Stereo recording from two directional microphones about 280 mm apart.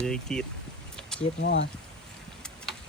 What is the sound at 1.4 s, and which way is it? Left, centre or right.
Speech, left.